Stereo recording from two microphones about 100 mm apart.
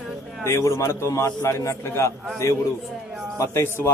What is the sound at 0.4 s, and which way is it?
A man's voice, 30° left (ahead or behind).